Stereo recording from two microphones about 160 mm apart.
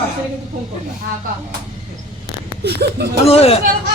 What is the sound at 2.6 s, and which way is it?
Speech, 80° right.